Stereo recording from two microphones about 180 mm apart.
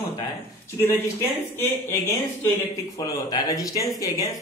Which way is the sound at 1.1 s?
15° left (ahead or behind).